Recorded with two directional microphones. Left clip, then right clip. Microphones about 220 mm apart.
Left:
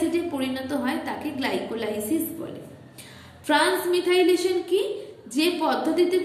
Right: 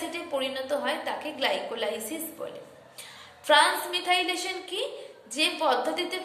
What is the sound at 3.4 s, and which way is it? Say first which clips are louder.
A woman's voice: even; 15° right (ahead or behind).